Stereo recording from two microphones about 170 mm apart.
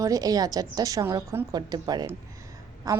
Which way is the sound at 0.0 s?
20° right (ahead or behind).